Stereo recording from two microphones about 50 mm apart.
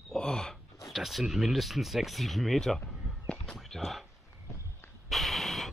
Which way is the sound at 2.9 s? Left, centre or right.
Centre.